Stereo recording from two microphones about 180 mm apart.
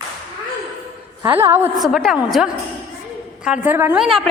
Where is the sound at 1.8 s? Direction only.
Centre (ahead or behind).